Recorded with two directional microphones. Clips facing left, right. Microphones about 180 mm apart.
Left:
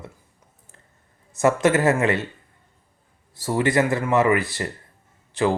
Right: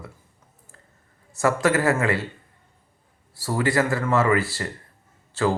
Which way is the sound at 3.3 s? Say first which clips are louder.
Left 2 dB; 20° left (ahead or behind).